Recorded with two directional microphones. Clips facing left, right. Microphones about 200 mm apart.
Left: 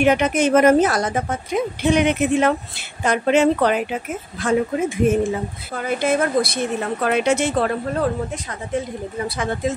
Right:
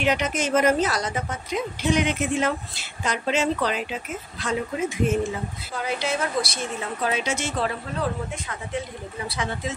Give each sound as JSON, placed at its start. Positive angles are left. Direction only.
{"t": 0.0, "sound": "a woman's voice", "side_deg": 55}
{"t": 9.4, "sound": "speech", "side_deg": 50}